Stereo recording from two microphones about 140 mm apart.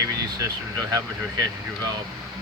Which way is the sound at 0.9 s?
25° right (ahead or behind).